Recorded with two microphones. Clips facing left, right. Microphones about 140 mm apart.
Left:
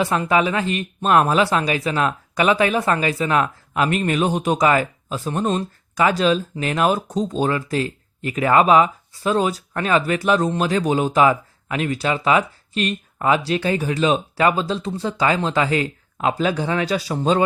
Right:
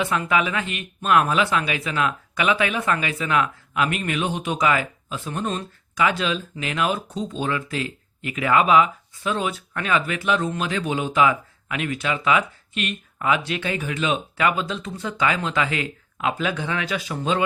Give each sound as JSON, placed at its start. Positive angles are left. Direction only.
{"t": 0.0, "sound": "speech", "side_deg": 35}